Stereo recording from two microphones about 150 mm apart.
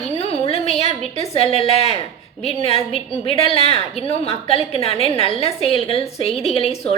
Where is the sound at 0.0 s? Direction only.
45° left (ahead or behind).